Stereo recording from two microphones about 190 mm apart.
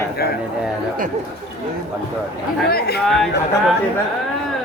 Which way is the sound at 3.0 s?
Centre (ahead or behind).